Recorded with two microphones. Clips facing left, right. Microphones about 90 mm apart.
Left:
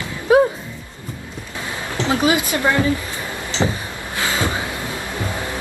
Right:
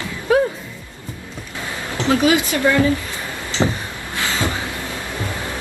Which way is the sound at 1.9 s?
20° left (ahead or behind).